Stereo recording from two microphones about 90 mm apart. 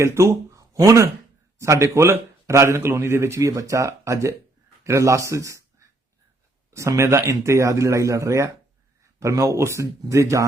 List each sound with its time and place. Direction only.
0.0 s speech: 30° right (ahead or behind)